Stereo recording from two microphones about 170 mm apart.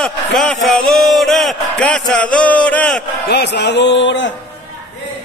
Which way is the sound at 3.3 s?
80° left.